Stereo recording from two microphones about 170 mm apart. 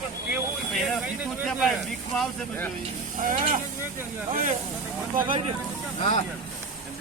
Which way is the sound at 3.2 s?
50° right (ahead or behind).